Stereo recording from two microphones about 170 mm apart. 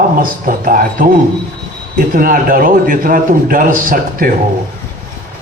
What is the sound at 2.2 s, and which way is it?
A man's voice, 55° right (ahead or behind).